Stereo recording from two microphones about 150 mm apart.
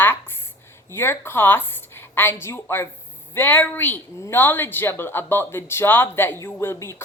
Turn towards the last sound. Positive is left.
turn(degrees=15)  # may be behind; listen again after turning